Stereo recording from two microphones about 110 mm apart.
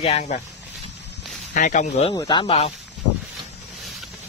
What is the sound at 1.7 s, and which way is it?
Speech, 90° left.